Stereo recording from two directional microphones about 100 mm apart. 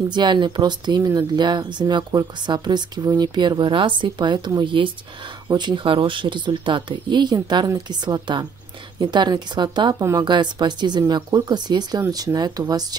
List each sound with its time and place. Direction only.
0.1 s speech: 50° right (ahead or behind)